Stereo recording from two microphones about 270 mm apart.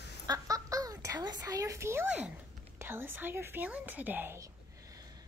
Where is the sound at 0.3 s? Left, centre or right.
Centre.